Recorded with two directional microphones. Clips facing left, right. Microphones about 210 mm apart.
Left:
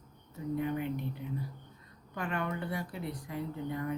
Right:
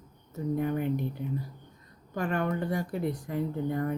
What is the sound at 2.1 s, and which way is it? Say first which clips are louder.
Speech: right 6 dB; 40° right (ahead or behind).